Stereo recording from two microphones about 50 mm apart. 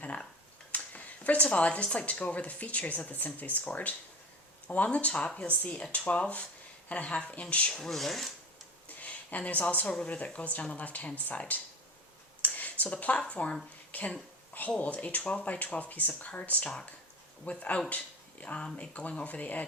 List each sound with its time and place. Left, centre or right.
0.7 s speech: left
7.7 s speech: centre
8.9 s a sound: left
10.1 s speech: left
12.4 s a sound: left
13.9 s speech: left